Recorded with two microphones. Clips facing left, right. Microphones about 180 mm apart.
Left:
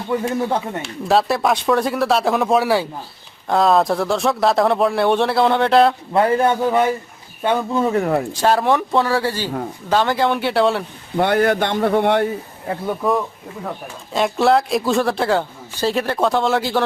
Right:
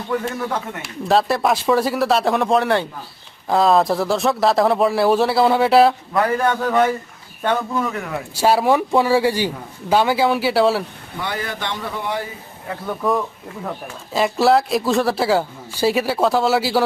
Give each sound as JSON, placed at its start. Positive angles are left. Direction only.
{"t": 0.1, "sound": "speech", "side_deg": 30}
{"t": 1.0, "sound": "speech", "side_deg": 0}
{"t": 6.1, "sound": "speech", "side_deg": 25}
{"t": 8.3, "sound": "speech", "side_deg": -10}
{"t": 11.2, "sound": "speech", "side_deg": 60}
{"t": 13.0, "sound": "speech", "side_deg": 0}